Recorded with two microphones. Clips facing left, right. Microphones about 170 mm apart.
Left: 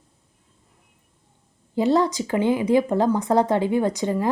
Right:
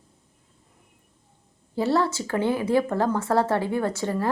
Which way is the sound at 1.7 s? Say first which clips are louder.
Left 3 dB; 15° left (ahead or behind).